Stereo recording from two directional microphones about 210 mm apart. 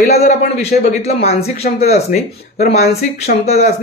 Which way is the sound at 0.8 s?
35° left (ahead or behind).